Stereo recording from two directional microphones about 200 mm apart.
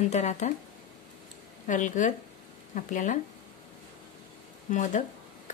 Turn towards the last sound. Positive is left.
turn(degrees=40)  # may be behind; listen again after turning